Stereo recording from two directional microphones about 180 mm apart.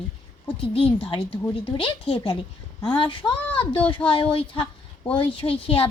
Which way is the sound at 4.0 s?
5° left (ahead or behind).